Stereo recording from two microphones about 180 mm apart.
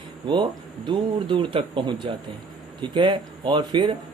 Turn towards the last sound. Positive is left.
turn(degrees=-25)  # may be behind; listen again after turning